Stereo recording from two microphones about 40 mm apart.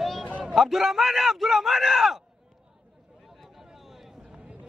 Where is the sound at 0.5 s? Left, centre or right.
Centre.